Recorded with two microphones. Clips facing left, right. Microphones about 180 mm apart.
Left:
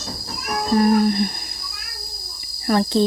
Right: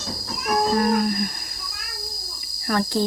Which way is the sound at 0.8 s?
25° left (ahead or behind).